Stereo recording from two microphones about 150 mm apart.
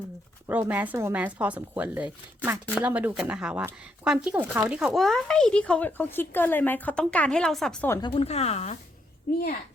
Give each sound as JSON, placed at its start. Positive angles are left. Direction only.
{"t": 0.4, "sound": "speech", "side_deg": -15}
{"t": 4.9, "sound": "speech", "side_deg": 5}
{"t": 8.0, "sound": "speech", "side_deg": 40}
{"t": 9.3, "sound": "a child's voice", "side_deg": 90}